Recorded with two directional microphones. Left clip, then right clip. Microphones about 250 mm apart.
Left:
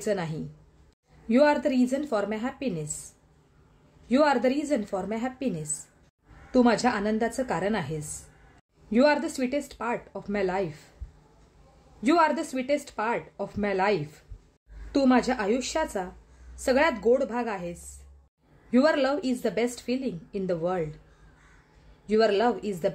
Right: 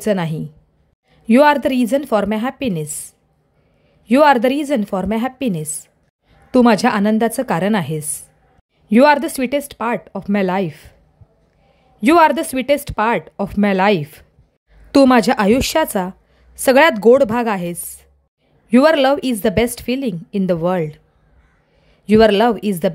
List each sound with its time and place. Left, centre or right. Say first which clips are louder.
0.0 s a woman's voice: right 10 dB; right
4.1 s a woman's voice: right 11 dB; right
12.0 s a woman's voice: right 11 dB; right
22.0 s a woman's voice: right 11 dB; right